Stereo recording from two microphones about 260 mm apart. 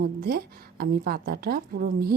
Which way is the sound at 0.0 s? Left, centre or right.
Right.